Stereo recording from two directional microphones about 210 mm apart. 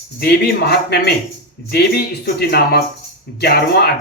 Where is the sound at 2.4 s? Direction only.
50° left (ahead or behind).